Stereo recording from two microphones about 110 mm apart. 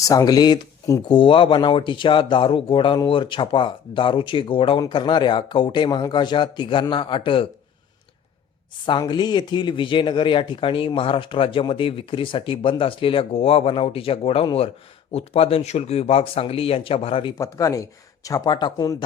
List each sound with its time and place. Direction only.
0.1 s speech: 35° left (ahead or behind)
1.0 s speech: 50° left (ahead or behind)
8.9 s speech: 45° left (ahead or behind)
17.3 s speech: 30° left (ahead or behind)